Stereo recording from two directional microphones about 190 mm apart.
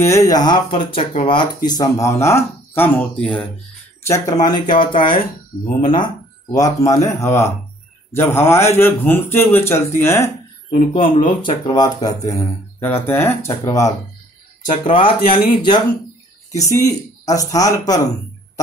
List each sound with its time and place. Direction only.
0.0 s speech: 15° left (ahead or behind)
4.0 s speech: 15° left (ahead or behind)
6.5 s speech: 15° left (ahead or behind)
10.7 s speech: 30° left (ahead or behind)
14.7 s speech: 30° left (ahead or behind)